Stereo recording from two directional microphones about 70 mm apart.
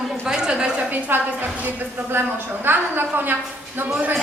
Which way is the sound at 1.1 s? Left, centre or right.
Right.